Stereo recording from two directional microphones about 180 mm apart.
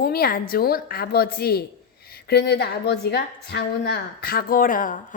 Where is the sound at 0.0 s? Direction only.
55° left (ahead or behind).